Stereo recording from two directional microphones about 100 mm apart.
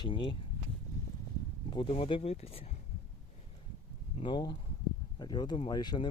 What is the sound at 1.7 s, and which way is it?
Speech, 60° left (ahead or behind).